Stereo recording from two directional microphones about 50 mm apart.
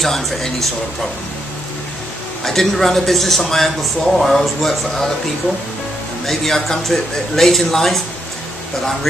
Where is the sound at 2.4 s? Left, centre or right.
Centre.